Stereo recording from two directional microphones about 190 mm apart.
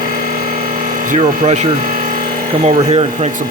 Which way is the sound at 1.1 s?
35° right (ahead or behind).